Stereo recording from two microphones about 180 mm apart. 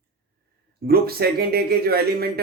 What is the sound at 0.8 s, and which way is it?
A man's voice, 60° right (ahead or behind).